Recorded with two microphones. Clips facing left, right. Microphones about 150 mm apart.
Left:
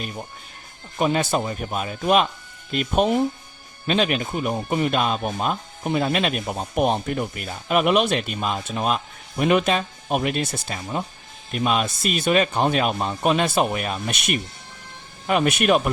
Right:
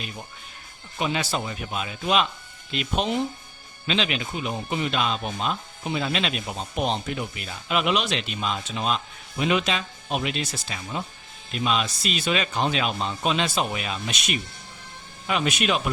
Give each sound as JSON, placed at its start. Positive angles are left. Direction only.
{"t": 0.9, "sound": "speech", "side_deg": 45}